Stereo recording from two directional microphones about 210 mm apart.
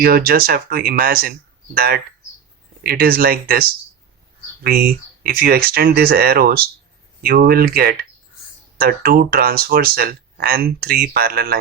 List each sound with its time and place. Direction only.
0.0 s speech: 45° right (ahead or behind)